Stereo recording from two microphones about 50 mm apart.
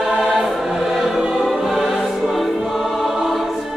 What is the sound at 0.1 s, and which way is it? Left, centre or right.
Choir, centre.